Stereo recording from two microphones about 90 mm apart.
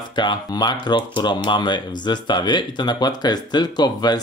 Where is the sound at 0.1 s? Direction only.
60° left (ahead or behind).